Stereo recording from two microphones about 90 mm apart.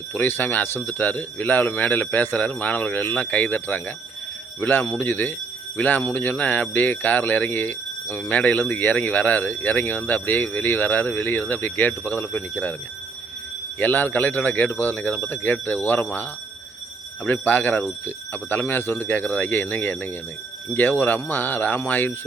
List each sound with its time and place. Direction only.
0.1 s speech: 25° left (ahead or behind)
13.7 s speech: 20° left (ahead or behind)
17.2 s speech: 20° left (ahead or behind)